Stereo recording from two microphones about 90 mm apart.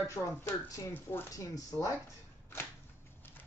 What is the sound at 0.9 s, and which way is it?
Speech, 25° left (ahead or behind).